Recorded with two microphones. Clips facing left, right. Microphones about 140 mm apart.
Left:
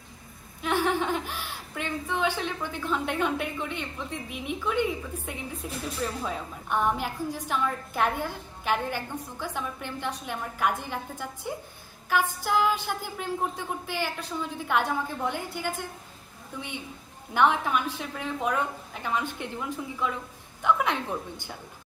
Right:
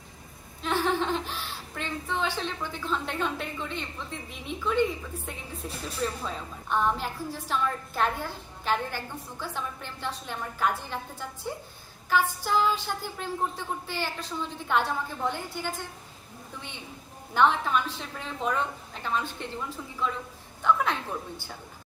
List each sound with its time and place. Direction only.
0.6 s a woman's voice: 15° left (ahead or behind)
17.3 s a woman's voice: 15° left (ahead or behind)